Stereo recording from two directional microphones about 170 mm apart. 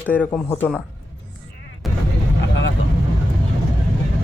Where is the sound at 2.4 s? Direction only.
90° left.